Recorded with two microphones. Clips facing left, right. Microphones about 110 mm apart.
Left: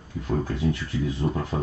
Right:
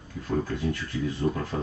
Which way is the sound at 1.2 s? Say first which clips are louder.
Right 2 dB; 20° left (ahead or behind).